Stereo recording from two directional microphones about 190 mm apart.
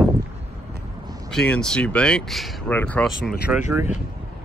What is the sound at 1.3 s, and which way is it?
Speech, 5° left (ahead or behind).